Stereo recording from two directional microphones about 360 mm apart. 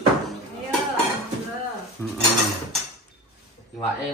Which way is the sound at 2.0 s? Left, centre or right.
Centre.